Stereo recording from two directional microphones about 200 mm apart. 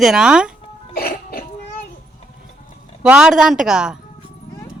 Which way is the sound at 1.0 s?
50° left (ahead or behind).